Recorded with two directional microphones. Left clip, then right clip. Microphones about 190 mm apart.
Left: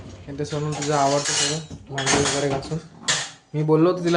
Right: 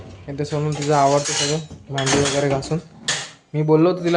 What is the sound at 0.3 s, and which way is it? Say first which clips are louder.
Speech: right 3 dB; 35° right (ahead or behind).